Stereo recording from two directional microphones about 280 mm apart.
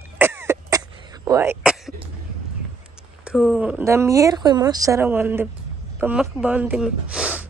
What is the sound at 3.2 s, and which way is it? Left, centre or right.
Speech, centre.